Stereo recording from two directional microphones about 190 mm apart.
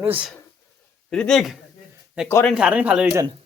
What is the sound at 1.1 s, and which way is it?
Speech, 5° left (ahead or behind).